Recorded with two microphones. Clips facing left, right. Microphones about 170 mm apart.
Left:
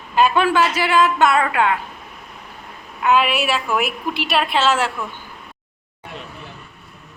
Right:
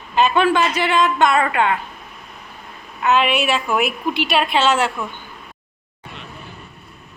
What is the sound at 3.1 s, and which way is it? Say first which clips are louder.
A woman's voice: even; 5° left (ahead or behind).